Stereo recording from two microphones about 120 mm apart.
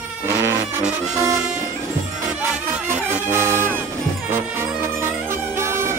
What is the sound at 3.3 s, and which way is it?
Music, 20° right (ahead or behind).